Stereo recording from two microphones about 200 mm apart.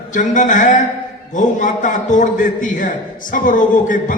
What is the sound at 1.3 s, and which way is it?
A man's voice, 40° left (ahead or behind).